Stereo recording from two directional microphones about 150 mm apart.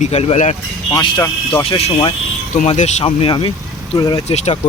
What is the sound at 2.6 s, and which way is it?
Speech, 45° left (ahead or behind).